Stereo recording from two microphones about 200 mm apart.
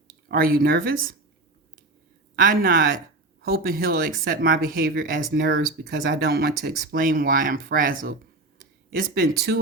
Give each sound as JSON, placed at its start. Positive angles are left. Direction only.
{"t": 0.3, "sound": "speech", "side_deg": -45}
{"t": 2.3, "sound": "speech", "side_deg": -45}